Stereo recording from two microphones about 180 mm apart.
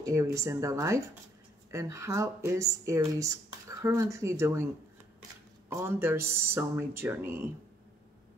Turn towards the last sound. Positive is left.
turn(degrees=-10)  # may be behind; listen again after turning